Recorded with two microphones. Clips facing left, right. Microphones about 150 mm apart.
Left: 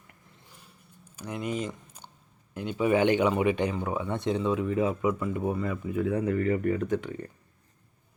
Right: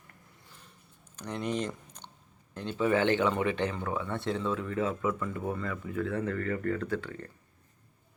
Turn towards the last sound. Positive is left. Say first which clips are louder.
# left 4 dB
turn(degrees=15)  # may be behind; listen again after turning